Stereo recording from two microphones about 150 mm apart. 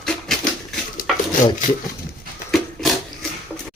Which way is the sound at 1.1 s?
Centre (ahead or behind).